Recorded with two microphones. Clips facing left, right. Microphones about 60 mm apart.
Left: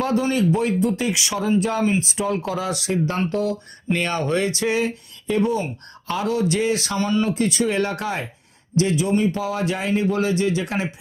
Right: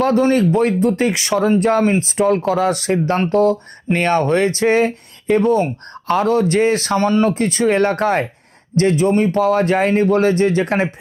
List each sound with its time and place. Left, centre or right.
0.0 s speech: right